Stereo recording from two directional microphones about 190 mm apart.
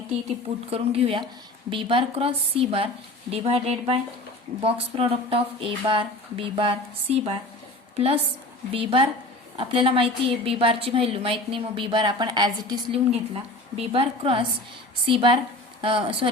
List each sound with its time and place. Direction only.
0.7 s a woman's voice: 30° right (ahead or behind)
13.1 s a woman's voice: 35° right (ahead or behind)